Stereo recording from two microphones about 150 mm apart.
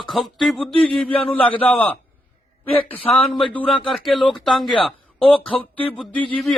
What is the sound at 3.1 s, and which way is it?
A man's voice, 5° left (ahead or behind).